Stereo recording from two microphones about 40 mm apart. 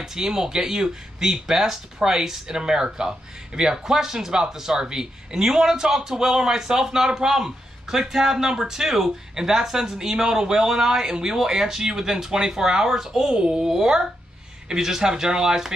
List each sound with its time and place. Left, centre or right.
0.0 s speech: centre